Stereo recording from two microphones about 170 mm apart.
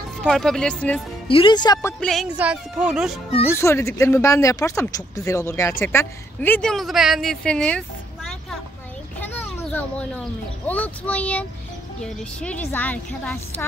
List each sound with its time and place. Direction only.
0.2 s speech: 5° left (ahead or behind)
1.3 s speech: 30° left (ahead or behind)
2.0 s speech: centre (ahead or behind)
3.5 s speech: 15° left (ahead or behind)
9.2 s children playing: 10° left (ahead or behind)
10.7 s speech: 10° left (ahead or behind)